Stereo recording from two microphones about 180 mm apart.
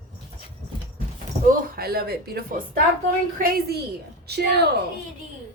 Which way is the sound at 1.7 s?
60° right (ahead or behind).